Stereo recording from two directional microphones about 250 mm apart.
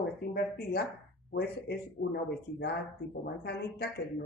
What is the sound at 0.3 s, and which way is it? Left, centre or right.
Speech, left.